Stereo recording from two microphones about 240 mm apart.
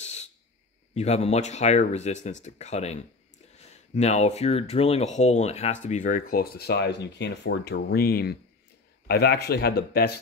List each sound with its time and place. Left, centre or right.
0.0 s owl: left
0.9 s speech: left